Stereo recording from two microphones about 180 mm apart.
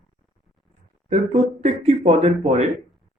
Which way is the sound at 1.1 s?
40° right (ahead or behind).